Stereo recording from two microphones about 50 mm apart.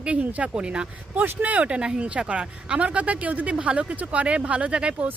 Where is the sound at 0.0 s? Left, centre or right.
Right.